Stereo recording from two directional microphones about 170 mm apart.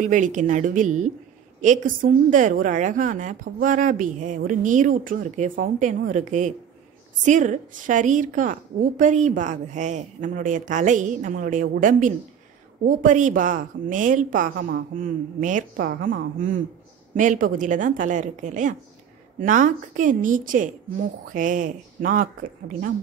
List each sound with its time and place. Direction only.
0.0 s a woman's voice: 45° right (ahead or behind)